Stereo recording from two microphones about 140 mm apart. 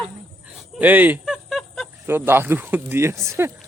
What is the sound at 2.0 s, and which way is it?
Speech, 15° right (ahead or behind).